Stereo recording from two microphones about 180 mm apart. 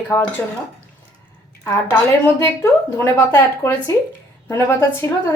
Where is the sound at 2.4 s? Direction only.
15° left (ahead or behind).